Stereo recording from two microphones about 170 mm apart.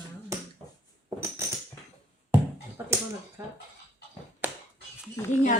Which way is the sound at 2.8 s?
10° right (ahead or behind).